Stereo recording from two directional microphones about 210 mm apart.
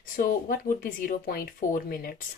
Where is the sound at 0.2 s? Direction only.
40° left (ahead or behind).